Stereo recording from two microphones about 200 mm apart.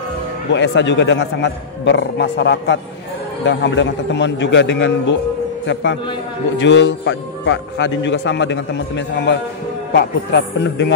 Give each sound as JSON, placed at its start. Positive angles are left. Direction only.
{"t": 0.5, "sound": "a man's voice", "side_deg": 60}
{"t": 6.6, "sound": "a man's voice", "side_deg": 65}